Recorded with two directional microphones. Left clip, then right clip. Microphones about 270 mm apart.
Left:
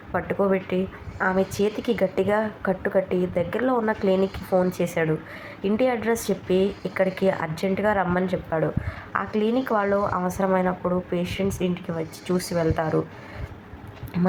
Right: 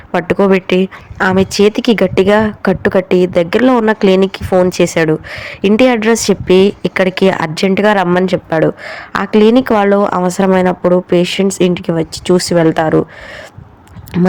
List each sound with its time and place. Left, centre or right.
0.1 s a woman's voice: right